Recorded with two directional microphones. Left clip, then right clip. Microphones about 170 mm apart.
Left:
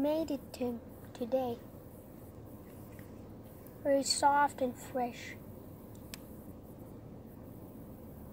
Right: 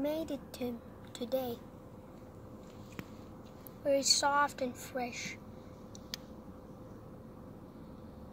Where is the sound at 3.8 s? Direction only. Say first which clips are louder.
Left 1 dB; 10° left (ahead or behind).